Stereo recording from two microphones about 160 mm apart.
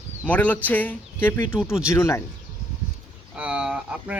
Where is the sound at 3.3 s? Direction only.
5° right (ahead or behind).